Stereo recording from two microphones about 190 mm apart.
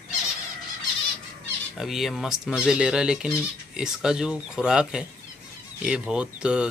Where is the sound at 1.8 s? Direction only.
Centre (ahead or behind).